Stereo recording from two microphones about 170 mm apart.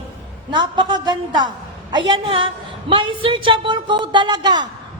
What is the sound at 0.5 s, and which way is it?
A woman's voice, 25° right (ahead or behind).